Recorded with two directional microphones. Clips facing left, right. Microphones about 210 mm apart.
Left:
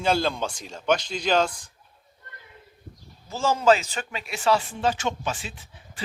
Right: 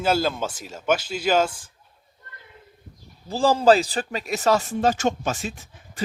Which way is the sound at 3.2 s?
35° right (ahead or behind).